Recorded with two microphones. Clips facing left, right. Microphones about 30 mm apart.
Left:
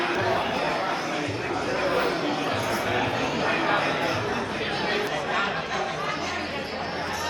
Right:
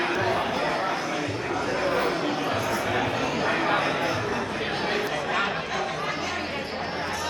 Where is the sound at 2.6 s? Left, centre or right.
Centre.